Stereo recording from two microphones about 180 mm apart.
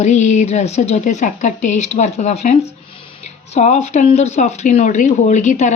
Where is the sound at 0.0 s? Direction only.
40° left (ahead or behind).